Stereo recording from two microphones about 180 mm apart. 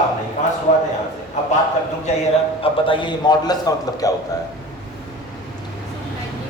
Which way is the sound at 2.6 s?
30° left (ahead or behind).